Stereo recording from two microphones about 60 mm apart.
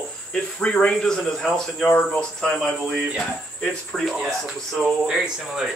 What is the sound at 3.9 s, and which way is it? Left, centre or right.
Speech, centre.